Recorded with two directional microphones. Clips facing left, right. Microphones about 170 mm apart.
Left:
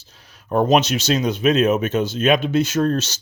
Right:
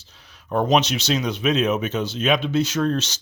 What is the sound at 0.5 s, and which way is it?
Speech, 45° left (ahead or behind).